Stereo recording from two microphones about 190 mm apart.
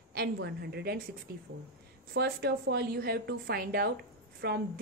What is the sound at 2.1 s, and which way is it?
A woman's voice, 55° right (ahead or behind).